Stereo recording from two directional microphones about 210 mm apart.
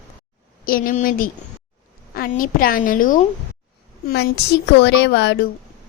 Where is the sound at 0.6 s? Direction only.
40° left (ahead or behind).